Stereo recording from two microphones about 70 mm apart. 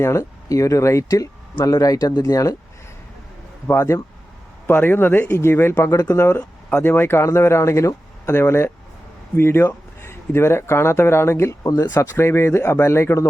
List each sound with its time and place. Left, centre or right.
0.0 s speech: left
2.2 s speech: left
3.7 s speech: left
4.6 s a man's voice: left
11.7 s speech: left
11.9 s speech: left